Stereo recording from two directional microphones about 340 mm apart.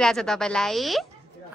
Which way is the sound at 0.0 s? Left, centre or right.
Centre.